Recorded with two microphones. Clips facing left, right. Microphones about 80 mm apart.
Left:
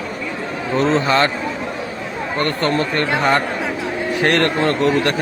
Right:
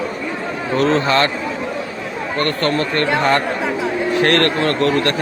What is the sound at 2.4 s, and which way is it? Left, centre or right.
Speech, left.